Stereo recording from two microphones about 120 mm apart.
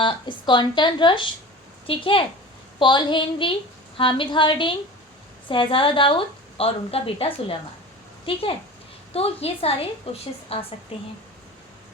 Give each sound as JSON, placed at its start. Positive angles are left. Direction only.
{"t": 0.0, "sound": "a woman's voice", "side_deg": 45}